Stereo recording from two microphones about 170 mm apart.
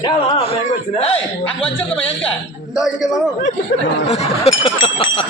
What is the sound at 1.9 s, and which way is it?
A man's voice, 5° left (ahead or behind).